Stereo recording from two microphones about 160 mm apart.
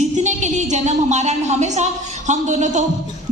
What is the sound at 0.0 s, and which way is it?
Music, 45° right (ahead or behind).